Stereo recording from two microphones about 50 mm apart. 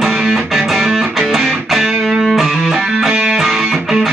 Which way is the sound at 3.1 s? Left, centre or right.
Centre.